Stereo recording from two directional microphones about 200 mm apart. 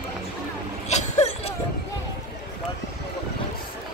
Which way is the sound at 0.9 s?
35° left (ahead or behind).